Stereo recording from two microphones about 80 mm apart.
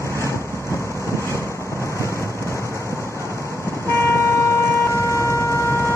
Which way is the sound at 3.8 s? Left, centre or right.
Left.